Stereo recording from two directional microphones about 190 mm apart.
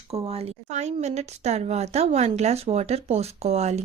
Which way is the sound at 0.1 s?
30° right (ahead or behind).